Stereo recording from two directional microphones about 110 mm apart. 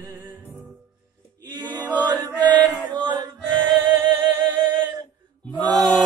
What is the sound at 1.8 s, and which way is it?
Chant, 15° right (ahead or behind).